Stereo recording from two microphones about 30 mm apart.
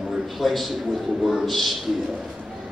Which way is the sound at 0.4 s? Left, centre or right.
Centre.